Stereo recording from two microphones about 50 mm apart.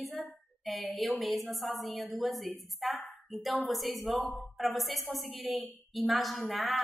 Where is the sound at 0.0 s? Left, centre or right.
Centre.